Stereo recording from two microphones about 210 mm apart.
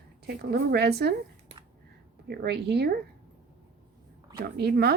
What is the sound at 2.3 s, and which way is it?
Speech, 50° right (ahead or behind).